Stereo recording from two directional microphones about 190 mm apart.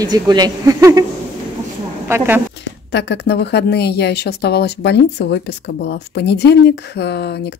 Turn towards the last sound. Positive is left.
turn(degrees=60)  # may be behind; listen again after turning